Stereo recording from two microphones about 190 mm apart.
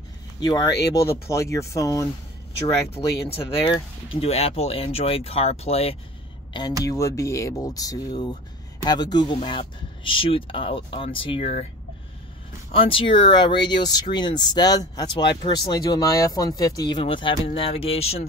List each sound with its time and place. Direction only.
0.4 s speech: 20° left (ahead or behind)
2.9 s speech: 30° left (ahead or behind)
6.8 s speech: 15° left (ahead or behind)
12.7 s speech: 30° left (ahead or behind)